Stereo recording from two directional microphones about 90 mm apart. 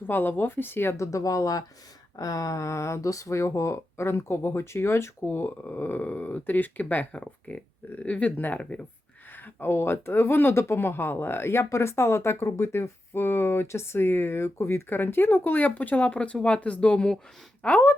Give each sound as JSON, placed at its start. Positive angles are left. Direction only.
{"t": 0.1, "sound": "speech", "side_deg": 20}